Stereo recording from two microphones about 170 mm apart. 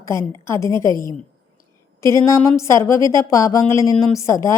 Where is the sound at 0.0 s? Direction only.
15° left (ahead or behind).